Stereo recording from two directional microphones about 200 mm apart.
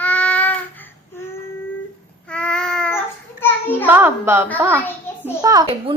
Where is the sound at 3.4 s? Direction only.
10° left (ahead or behind).